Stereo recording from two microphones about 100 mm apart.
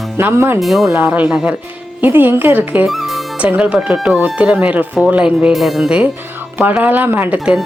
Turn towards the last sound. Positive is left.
turn(degrees=-15)  # may be behind; listen again after turning